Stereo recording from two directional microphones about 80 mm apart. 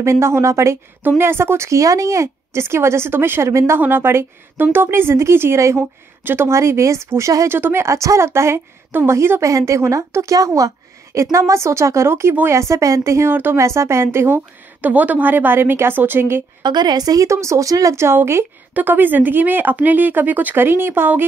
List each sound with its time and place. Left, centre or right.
0.0 s speech: right
16.6 s a woman's voice: right
18.0 s speech: right